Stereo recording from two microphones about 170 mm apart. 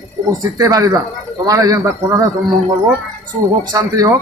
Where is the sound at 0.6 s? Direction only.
20° right (ahead or behind).